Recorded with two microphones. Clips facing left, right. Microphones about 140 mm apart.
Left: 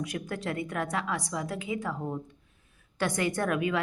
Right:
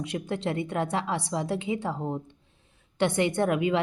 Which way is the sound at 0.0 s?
25° right (ahead or behind).